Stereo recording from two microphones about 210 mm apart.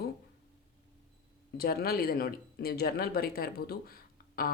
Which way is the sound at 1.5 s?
45° left (ahead or behind).